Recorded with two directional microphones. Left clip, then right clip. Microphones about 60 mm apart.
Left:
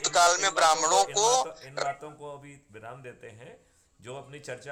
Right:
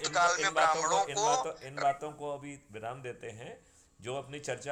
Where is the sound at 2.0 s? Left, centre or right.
Right.